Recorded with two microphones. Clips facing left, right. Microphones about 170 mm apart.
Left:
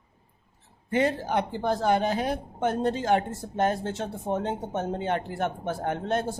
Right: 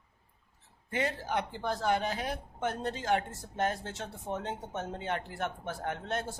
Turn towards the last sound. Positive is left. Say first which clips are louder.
# left 7 dB
turn(degrees=30)  # may be behind; listen again after turning